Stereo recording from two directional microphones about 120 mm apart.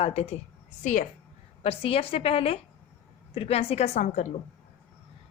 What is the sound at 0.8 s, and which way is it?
Speech, 90° left.